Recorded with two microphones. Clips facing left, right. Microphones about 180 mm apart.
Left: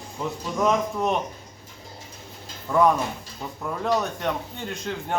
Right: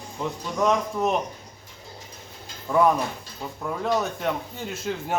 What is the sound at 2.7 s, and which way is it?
A man's voice, 5° right (ahead or behind).